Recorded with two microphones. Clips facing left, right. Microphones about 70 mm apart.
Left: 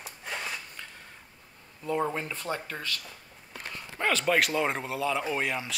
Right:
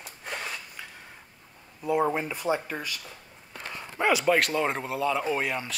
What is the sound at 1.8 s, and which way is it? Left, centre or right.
Speech, centre.